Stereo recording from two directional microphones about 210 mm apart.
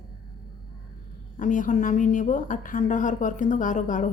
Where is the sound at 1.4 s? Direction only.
40° left (ahead or behind).